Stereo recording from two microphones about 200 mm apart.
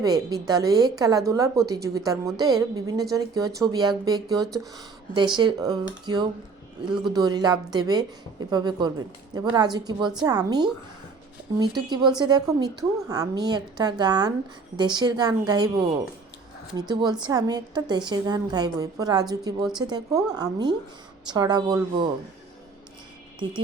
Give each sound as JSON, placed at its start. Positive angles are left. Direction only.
{"t": 0.0, "sound": "a woman's voice", "side_deg": -20}
{"t": 16.9, "sound": "a woman's voice", "side_deg": -20}